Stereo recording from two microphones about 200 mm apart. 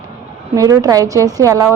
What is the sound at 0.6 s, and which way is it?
A woman's voice, 15° right (ahead or behind).